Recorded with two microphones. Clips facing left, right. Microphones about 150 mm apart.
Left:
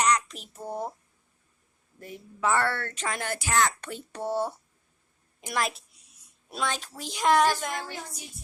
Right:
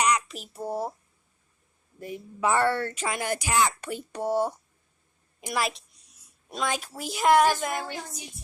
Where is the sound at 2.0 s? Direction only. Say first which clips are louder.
Right 3 dB; 15° right (ahead or behind).